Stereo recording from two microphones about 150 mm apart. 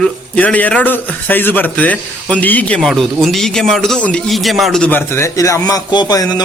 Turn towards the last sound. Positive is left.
turn(degrees=25)  # may be behind; listen again after turning